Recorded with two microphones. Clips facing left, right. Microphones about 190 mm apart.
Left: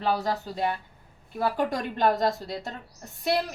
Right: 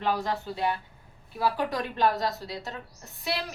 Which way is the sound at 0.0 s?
35° left (ahead or behind).